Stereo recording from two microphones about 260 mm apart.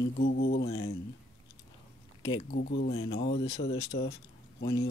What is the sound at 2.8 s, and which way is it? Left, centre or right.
Speech, left.